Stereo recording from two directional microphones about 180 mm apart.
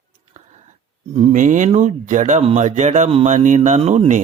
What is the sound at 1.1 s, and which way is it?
Speech, 40° right (ahead or behind).